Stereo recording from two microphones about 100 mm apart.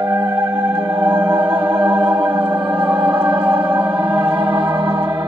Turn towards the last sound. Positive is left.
turn(degrees=-55)  # may be behind; listen again after turning